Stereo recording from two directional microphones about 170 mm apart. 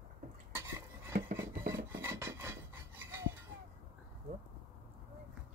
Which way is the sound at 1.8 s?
15° right (ahead or behind).